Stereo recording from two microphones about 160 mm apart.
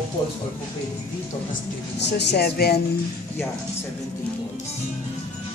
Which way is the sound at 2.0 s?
90° left.